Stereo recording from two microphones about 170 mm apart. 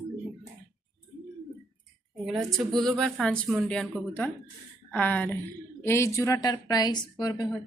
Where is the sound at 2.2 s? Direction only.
Centre (ahead or behind).